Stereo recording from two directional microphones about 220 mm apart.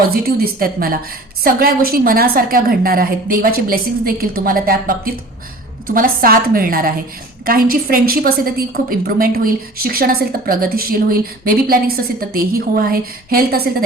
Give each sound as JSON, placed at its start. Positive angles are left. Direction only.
{"t": 0.1, "sound": "a woman's voice", "side_deg": -40}